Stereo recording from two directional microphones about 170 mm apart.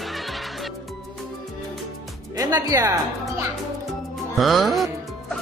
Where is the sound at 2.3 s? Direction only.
20° right (ahead or behind).